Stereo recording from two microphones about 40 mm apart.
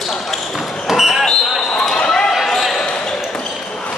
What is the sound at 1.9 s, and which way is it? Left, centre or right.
Basketball bounce, left.